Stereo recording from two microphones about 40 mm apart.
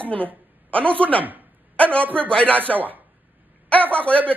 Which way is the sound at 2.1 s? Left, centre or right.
Left.